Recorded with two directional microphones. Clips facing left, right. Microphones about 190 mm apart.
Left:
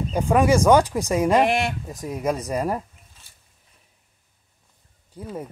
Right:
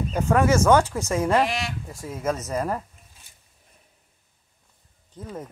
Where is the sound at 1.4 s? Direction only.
55° left (ahead or behind).